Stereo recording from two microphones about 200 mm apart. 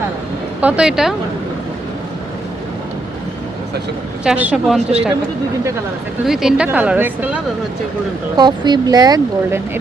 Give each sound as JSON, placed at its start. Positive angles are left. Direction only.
{"t": 0.6, "sound": "speech", "side_deg": -5}
{"t": 4.2, "sound": "speech", "side_deg": -5}
{"t": 6.2, "sound": "speech", "side_deg": -5}
{"t": 8.4, "sound": "speech", "side_deg": -20}